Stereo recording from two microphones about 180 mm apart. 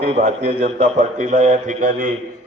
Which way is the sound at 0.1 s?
35° right (ahead or behind).